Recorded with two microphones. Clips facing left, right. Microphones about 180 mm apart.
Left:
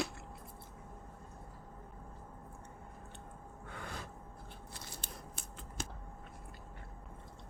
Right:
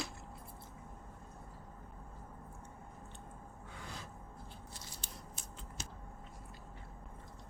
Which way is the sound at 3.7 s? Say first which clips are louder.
Left 4 dB; 60° left (ahead or behind).